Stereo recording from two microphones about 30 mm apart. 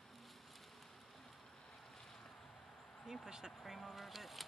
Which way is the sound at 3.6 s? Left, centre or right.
Centre.